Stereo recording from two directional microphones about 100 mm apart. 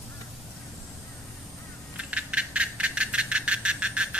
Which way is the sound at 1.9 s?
10° right (ahead or behind).